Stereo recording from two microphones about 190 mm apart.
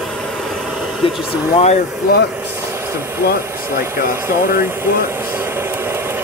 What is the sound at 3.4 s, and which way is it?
Speech, 15° right (ahead or behind).